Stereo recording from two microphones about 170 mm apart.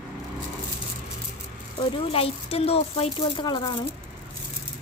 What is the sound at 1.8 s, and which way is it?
Speech, 35° left (ahead or behind).